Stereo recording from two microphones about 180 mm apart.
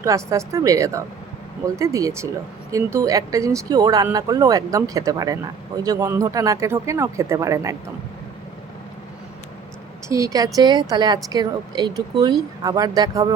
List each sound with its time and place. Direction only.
0.0 s speech: 15° right (ahead or behind)
10.1 s a woman's voice: 20° right (ahead or behind)